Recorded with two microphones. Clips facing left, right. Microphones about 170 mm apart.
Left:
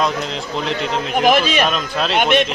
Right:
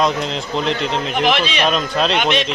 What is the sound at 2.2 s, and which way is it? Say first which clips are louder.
Speech: left 3 dB; 50° left (ahead or behind).